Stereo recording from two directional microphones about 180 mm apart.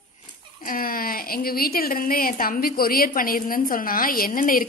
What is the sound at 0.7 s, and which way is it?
Speech, 55° left (ahead or behind).